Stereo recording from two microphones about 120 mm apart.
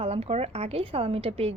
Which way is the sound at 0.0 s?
55° right (ahead or behind).